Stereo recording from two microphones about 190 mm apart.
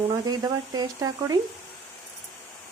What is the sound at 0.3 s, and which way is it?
Speech, 20° right (ahead or behind).